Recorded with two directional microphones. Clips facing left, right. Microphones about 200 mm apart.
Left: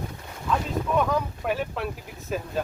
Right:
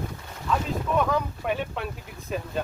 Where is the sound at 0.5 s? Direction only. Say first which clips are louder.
Even; centre (ahead or behind).